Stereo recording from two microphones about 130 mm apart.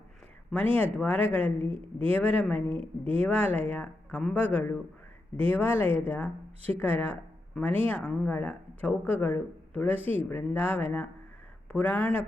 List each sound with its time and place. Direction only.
0.8 s a woman's voice: 10° left (ahead or behind)
1.5 s a woman's voice: 45° right (ahead or behind)
2.1 s a woman's voice: 10° left (ahead or behind)
2.6 s a woman's voice: 50° right (ahead or behind)
3.2 s a woman's voice: 10° left (ahead or behind)